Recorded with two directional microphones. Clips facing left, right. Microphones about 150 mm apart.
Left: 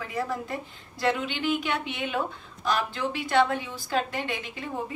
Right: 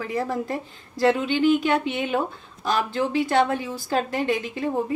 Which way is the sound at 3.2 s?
40° right (ahead or behind).